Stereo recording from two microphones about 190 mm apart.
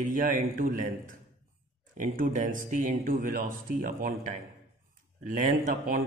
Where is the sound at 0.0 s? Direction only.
45° right (ahead or behind).